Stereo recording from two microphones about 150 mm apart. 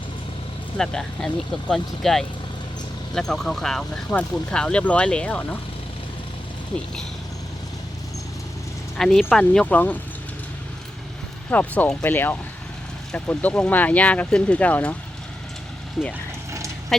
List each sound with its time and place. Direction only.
0.8 s speech: 5° left (ahead or behind)
9.0 s speech: centre (ahead or behind)
11.5 s speech: 10° left (ahead or behind)
16.0 s speech: centre (ahead or behind)
16.5 s vehicle: 20° right (ahead or behind)